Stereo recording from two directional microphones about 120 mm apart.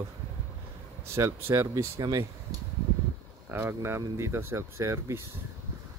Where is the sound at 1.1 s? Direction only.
25° right (ahead or behind).